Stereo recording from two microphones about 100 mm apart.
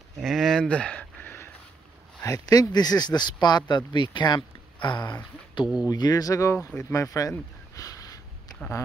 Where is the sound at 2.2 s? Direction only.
35° left (ahead or behind).